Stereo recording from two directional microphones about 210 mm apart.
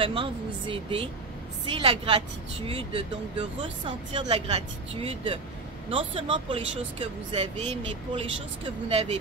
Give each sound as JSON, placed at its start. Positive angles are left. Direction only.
{"t": 0.0, "sound": "speech", "side_deg": -25}